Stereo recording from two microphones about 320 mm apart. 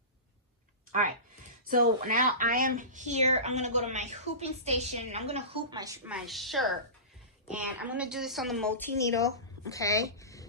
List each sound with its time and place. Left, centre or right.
1.6 s a woman's voice: right; by 10.4 s centre